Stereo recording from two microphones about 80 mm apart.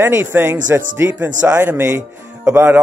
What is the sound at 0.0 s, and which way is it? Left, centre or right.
Speech, right.